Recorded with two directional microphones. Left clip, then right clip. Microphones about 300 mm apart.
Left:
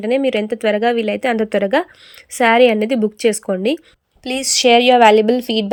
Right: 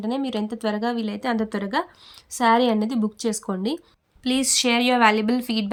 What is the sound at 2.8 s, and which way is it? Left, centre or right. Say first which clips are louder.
A woman's voice: left 10 dB; centre.